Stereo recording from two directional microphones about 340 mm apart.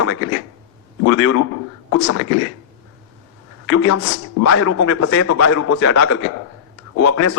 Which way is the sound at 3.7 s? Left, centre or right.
Left.